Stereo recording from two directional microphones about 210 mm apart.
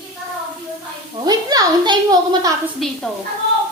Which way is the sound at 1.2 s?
20° right (ahead or behind).